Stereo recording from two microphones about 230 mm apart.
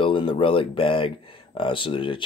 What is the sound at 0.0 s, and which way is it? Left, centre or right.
Speech, left.